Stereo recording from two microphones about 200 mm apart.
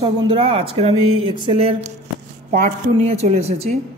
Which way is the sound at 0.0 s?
25° right (ahead or behind).